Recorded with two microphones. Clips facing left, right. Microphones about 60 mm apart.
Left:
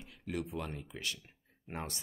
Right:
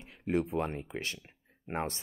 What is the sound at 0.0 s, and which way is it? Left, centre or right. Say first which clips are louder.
Speech: right 8 dB; right.